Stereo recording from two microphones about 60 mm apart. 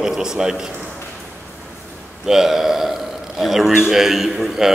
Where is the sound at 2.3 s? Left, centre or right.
Centre.